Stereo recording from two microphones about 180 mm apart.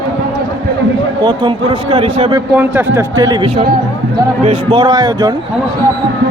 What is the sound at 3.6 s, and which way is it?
Speech, 60° right (ahead or behind).